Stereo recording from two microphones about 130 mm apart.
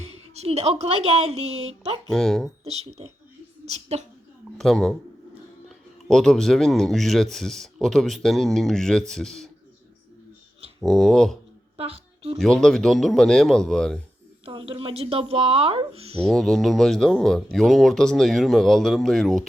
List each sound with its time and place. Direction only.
0.0 s a woman's voice: 55° right (ahead or behind)
2.0 s speech: 5° left (ahead or behind)
2.6 s speech: 55° right (ahead or behind)
4.5 s speech: 5° left (ahead or behind)
10.8 s speech: centre (ahead or behind)
11.8 s a sound: 50° right (ahead or behind)
12.4 s speech: 5° left (ahead or behind)
14.4 s a woman's voice: 45° right (ahead or behind)
16.2 s speech: centre (ahead or behind)